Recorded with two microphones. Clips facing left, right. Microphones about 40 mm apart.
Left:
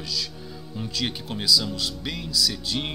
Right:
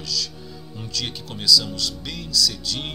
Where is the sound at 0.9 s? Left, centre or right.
Centre.